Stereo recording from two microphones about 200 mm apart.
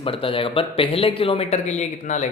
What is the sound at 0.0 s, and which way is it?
A man's voice, 25° left (ahead or behind).